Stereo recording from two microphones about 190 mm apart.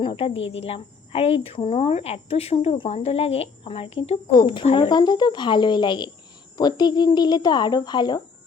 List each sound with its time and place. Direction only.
0.0 s speech: 30° left (ahead or behind)